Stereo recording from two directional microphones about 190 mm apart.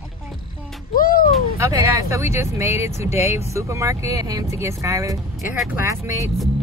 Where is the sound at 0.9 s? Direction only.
50° left (ahead or behind).